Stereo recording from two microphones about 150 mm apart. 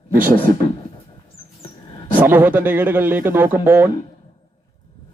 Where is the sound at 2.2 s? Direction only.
15° right (ahead or behind).